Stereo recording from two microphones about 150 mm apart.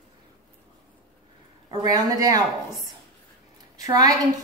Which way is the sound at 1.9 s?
25° right (ahead or behind).